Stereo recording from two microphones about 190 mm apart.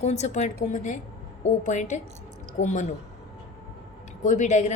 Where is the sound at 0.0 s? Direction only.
35° left (ahead or behind).